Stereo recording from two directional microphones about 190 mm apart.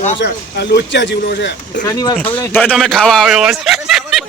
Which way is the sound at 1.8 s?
20° left (ahead or behind).